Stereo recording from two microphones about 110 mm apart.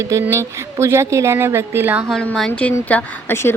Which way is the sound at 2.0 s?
5° left (ahead or behind).